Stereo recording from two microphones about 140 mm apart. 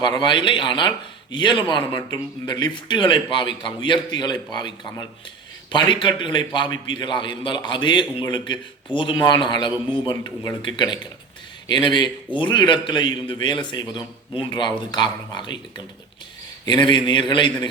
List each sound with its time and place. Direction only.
0.0 s a man's voice: 30° left (ahead or behind)
16.6 s a man's voice: 35° left (ahead or behind)